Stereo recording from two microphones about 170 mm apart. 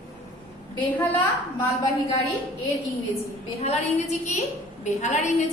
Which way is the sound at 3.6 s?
45° left (ahead or behind).